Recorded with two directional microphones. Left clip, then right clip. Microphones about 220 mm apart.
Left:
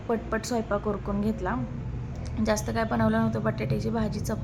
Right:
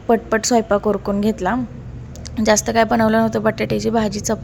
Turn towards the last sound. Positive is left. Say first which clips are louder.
# right 12 dB
turn(degrees=-35)  # may be behind; listen again after turning